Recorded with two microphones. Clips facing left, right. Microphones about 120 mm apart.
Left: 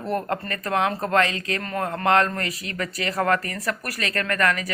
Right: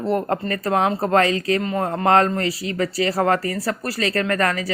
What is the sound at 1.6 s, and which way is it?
Speech, 20° right (ahead or behind).